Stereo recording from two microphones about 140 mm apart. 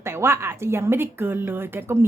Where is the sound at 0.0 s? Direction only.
20° right (ahead or behind).